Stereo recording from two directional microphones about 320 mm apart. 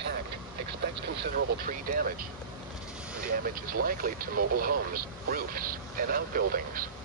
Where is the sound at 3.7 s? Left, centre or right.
Right.